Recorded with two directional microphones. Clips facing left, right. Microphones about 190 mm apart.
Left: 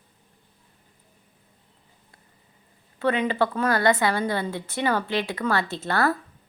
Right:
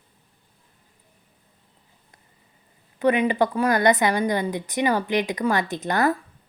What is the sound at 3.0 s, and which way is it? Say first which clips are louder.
A woman's voice: right 3 dB; 15° right (ahead or behind).